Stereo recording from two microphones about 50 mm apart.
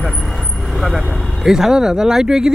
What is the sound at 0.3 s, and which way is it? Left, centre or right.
Vehicle, centre.